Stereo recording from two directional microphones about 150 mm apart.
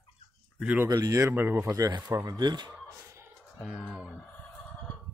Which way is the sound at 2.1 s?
25° right (ahead or behind).